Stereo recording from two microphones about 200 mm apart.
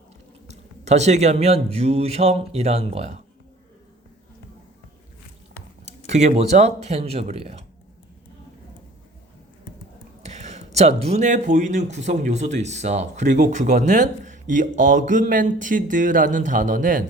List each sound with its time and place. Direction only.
0.5 s speech: 35° right (ahead or behind)
5.8 s speech: 35° right (ahead or behind)
10.2 s speech: 35° right (ahead or behind)